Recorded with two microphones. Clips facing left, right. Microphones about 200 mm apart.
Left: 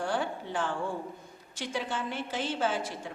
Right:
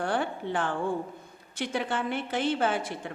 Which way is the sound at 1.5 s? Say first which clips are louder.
Right 4 dB; 60° right (ahead or behind).